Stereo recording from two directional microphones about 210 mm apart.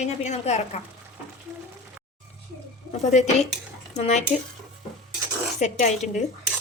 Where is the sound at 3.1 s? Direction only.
35° left (ahead or behind).